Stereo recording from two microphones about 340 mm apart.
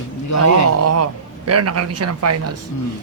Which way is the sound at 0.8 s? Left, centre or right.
Right.